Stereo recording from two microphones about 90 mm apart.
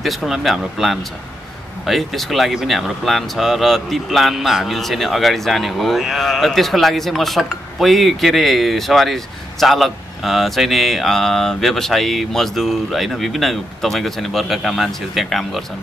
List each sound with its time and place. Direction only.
0.0 s speech: centre (ahead or behind)